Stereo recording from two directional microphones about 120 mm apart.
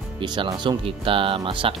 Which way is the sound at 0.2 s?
40° right (ahead or behind).